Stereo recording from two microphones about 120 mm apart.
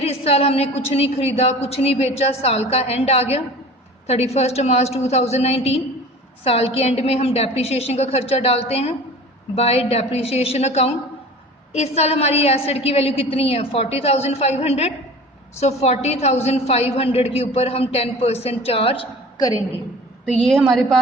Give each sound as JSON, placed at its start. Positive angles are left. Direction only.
{"t": 0.0, "sound": "a woman's voice", "side_deg": 60}
{"t": 20.5, "sound": "a woman's voice", "side_deg": 5}